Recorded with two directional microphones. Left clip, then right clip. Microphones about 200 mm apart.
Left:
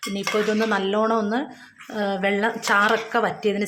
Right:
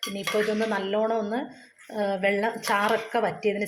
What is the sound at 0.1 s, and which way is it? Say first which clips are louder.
A woman's voice: left 4 dB; 10° left (ahead or behind).